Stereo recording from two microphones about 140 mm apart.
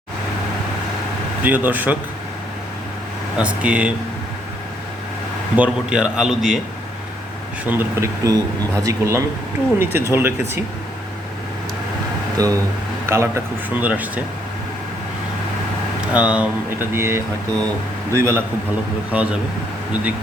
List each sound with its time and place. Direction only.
1.5 s a man's voice: 10° right (ahead or behind)
3.3 s a man's voice: 10° right (ahead or behind)
5.5 s a man's voice: 10° right (ahead or behind)
7.6 s a man's voice: 10° right (ahead or behind)
8.2 s a man's voice: 25° right (ahead or behind)
12.4 s a man's voice: 25° right (ahead or behind)
16.1 s a man's voice: 10° right (ahead or behind)
19.1 s a man's voice: 5° right (ahead or behind)